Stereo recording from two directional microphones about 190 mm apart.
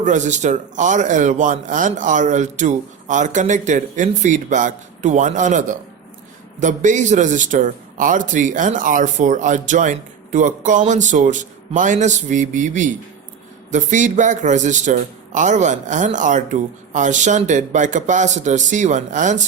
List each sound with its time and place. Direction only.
0.0 s a man's voice: 40° right (ahead or behind)